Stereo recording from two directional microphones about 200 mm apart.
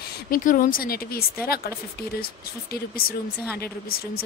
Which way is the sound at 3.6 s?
50° left (ahead or behind).